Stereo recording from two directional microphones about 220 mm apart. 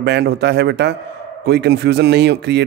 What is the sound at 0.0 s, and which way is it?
Speech, 50° right (ahead or behind).